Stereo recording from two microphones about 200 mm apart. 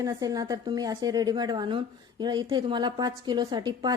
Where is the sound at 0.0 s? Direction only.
15° right (ahead or behind).